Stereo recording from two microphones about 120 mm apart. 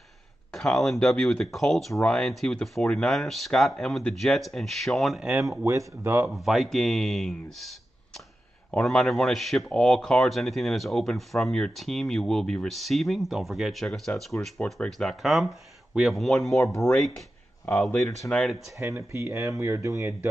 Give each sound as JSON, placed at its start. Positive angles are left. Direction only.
{"t": 0.5, "sound": "speech", "side_deg": 5}
{"t": 5.4, "sound": "speech", "side_deg": -25}
{"t": 6.3, "sound": "speech", "side_deg": 0}
{"t": 8.7, "sound": "speech", "side_deg": 5}
{"t": 18.8, "sound": "speech", "side_deg": -20}